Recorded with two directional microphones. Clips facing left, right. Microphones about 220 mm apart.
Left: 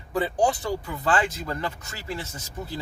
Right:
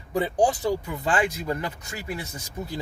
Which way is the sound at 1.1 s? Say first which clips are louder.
Even; 10° right (ahead or behind).